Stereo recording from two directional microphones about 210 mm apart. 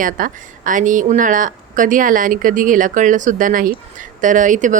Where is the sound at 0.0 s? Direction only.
40° right (ahead or behind).